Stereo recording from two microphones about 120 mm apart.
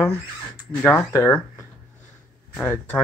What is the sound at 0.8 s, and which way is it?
Speech, 20° left (ahead or behind).